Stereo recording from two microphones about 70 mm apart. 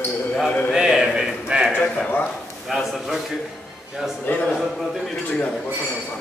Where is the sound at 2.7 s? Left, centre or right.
Centre.